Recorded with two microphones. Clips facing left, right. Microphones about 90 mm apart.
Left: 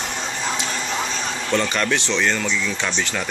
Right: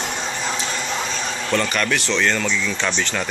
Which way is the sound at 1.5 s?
20° left (ahead or behind).